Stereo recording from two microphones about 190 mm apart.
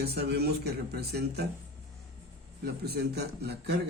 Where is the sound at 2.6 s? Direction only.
60° right (ahead or behind).